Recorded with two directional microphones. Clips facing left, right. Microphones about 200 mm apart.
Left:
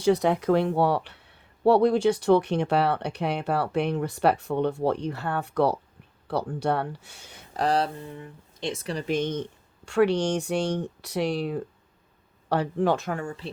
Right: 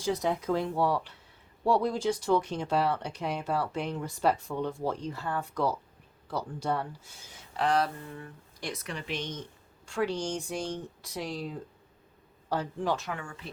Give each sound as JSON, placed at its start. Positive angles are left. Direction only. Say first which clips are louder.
{"t": 0.0, "sound": "speech", "louder": "left 8 dB", "side_deg": 70}
{"t": 7.5, "sound": "speech", "louder": "left 3 dB", "side_deg": 35}
{"t": 8.0, "sound": "speech", "louder": "left 3 dB", "side_deg": 20}
{"t": 9.8, "sound": "speech", "louder": "left 9 dB", "side_deg": 70}